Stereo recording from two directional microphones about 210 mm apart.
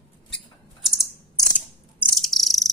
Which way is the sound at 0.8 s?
Centre (ahead or behind).